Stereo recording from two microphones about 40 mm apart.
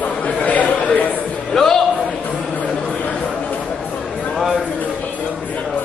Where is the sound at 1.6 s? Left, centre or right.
Centre.